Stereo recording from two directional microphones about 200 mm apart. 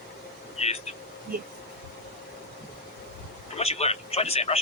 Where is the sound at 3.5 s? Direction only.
30° left (ahead or behind).